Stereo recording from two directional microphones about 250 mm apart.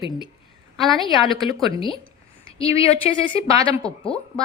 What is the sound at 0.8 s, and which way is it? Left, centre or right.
Speech, centre.